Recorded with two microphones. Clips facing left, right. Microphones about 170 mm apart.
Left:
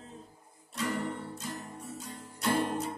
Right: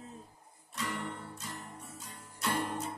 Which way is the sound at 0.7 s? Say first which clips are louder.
Left 5 dB; 40° left (ahead or behind).